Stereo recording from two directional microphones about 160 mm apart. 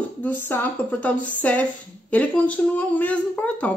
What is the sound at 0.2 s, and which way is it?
Speech, 10° left (ahead or behind).